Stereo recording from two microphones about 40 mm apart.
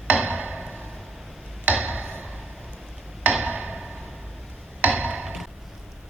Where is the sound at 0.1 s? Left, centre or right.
Right.